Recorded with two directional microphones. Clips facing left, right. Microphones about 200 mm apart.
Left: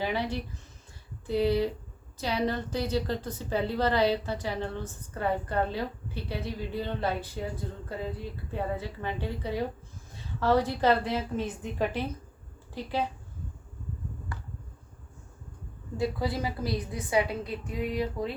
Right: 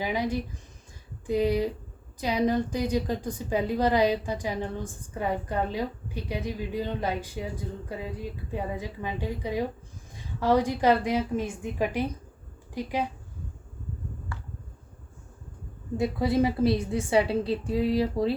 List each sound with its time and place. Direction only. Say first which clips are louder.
0.0 s a woman's voice: right 2 dB; 15° right (ahead or behind)
8.5 s a woman's voice: left 1 dB; 10° right (ahead or behind)
16.0 s a woman's voice: right 6 dB; 25° right (ahead or behind)